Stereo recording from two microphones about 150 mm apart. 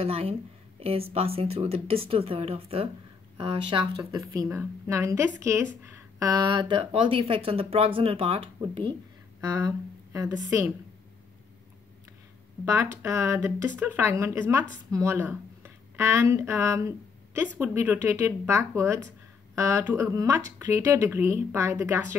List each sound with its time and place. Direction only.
0.0 s speech: 40° right (ahead or behind)
4.3 s a woman's voice: 20° right (ahead or behind); by 8.9 s 35° right (ahead or behind)
9.4 s speech: 25° right (ahead or behind)
12.6 s a woman's voice: 20° right (ahead or behind)